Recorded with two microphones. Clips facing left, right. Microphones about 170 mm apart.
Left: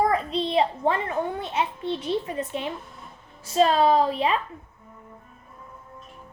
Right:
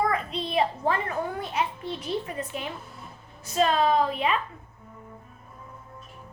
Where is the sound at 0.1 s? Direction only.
35° left (ahead or behind).